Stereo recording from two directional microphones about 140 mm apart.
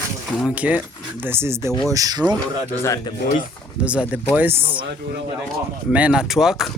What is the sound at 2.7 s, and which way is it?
Speech, 20° left (ahead or behind).